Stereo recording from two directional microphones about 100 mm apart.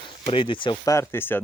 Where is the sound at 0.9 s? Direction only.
25° left (ahead or behind).